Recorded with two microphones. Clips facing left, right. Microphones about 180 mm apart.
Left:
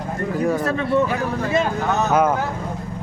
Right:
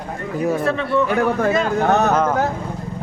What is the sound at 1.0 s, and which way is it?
Speech, 65° right (ahead or behind).